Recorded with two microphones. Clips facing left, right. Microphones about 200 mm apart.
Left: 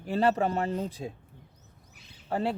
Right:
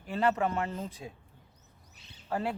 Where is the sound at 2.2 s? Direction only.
30° left (ahead or behind).